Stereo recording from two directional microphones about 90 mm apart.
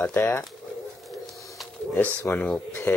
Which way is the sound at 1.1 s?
Centre (ahead or behind).